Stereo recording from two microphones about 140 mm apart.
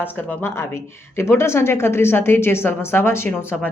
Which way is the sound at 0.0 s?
15° left (ahead or behind).